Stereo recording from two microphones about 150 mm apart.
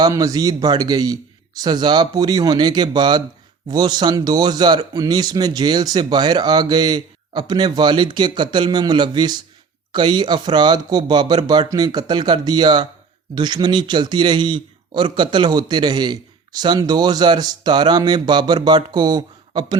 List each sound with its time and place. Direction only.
0.0 s a man's voice: 25° right (ahead or behind)